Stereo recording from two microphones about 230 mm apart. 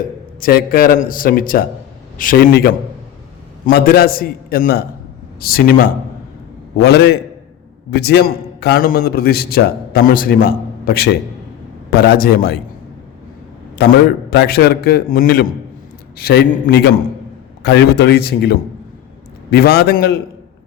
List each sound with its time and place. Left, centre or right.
0.4 s a man's voice: left
3.7 s a man's voice: left
14.3 s a man's voice: left